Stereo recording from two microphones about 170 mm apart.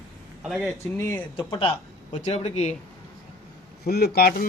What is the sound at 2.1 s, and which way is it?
Speech, 40° left (ahead or behind).